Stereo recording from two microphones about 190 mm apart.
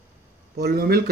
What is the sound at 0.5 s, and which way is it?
Speech, 55° right (ahead or behind).